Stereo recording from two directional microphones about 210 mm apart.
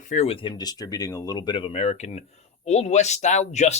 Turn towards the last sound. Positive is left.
turn(degrees=35)  # may be behind; listen again after turning